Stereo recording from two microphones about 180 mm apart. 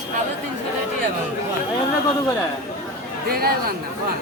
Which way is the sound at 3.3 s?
55° right (ahead or behind).